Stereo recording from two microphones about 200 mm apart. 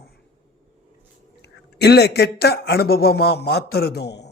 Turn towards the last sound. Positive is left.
turn(degrees=55)  # may be behind; listen again after turning